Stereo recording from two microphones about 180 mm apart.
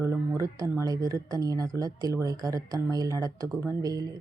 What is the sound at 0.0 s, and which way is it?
Speech, 15° right (ahead or behind).